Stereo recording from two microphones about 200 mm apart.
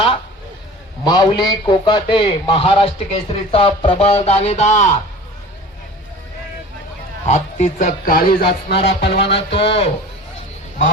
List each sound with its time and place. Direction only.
1.0 s a man's voice: 20° left (ahead or behind)
7.3 s speech: 35° left (ahead or behind); by 9.3 s 55° left (ahead or behind)
9.6 s a man's voice: 30° left (ahead or behind)